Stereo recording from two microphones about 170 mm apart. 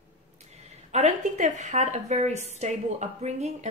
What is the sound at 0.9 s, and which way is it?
A woman's voice, 40° right (ahead or behind).